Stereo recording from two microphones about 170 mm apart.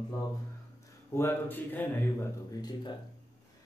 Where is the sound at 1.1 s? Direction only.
15° left (ahead or behind).